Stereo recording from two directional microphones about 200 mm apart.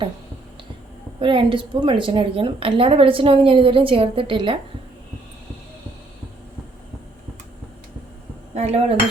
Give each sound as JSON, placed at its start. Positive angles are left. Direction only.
{"t": 1.2, "sound": "a woman's voice", "side_deg": -25}
{"t": 8.5, "sound": "speech", "side_deg": -30}